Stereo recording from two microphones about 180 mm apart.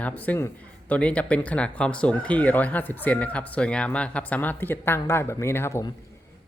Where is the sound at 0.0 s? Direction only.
10° left (ahead or behind).